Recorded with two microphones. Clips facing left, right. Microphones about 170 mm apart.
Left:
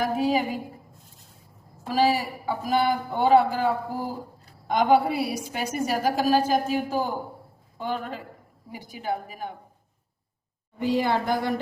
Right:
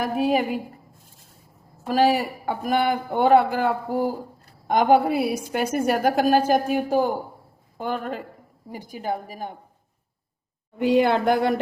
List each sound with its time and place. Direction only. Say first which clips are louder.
0.0 s speech: right 2 dB; 55° right (ahead or behind)
1.9 s a woman's voice: right 3 dB; 55° right (ahead or behind)
10.8 s speech: right 5 dB; 65° right (ahead or behind)